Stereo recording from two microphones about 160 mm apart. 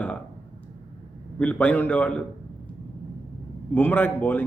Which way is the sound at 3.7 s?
10° left (ahead or behind).